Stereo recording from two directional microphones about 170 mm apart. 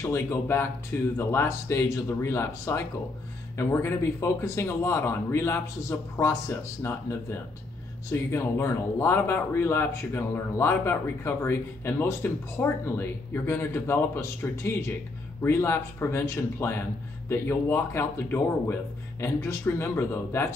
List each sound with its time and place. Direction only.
0.0 s speech: 15° left (ahead or behind)